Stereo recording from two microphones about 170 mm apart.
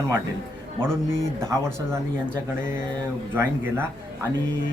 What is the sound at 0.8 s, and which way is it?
Speech, 15° right (ahead or behind).